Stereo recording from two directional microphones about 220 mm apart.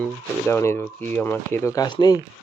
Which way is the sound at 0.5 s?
10° left (ahead or behind).